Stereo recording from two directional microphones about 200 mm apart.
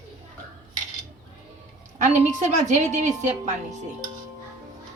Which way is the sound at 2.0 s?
40° right (ahead or behind).